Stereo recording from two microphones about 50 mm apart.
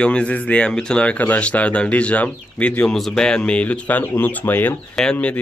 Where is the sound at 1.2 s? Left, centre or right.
Left.